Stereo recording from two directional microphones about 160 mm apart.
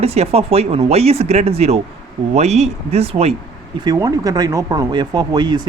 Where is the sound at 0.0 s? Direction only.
40° right (ahead or behind).